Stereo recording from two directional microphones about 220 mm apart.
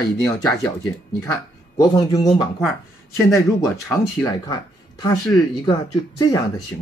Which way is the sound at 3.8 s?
15° left (ahead or behind).